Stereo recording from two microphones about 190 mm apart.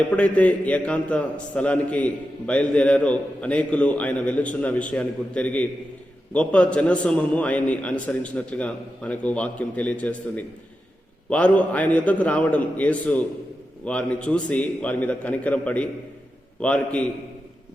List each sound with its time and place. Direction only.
0.1 s a man's voice: 5° left (ahead or behind)